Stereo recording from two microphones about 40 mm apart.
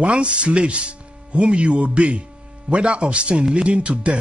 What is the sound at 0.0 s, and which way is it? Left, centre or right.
Speech, right.